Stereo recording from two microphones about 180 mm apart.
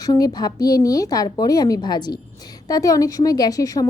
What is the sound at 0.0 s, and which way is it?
A woman's voice, 20° left (ahead or behind).